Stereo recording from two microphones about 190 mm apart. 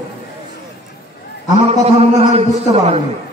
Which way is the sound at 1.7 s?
35° right (ahead or behind).